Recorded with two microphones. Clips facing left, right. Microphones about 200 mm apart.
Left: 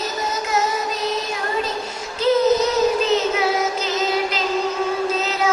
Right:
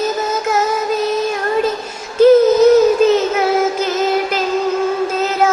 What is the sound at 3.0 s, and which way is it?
Music, 50° right (ahead or behind).